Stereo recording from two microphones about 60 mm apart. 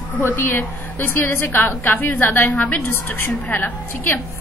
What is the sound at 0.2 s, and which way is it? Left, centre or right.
A woman's voice, left.